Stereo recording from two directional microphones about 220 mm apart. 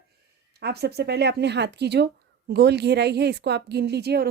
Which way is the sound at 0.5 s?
50° right (ahead or behind).